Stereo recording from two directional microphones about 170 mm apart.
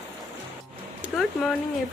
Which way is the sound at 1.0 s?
5° right (ahead or behind).